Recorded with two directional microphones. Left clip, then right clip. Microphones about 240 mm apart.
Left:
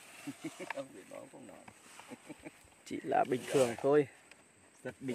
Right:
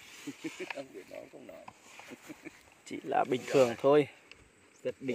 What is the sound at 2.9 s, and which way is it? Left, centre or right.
Speech, centre.